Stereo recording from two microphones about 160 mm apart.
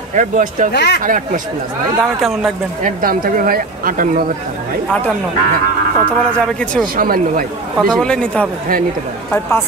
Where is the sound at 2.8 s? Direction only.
65° right (ahead or behind).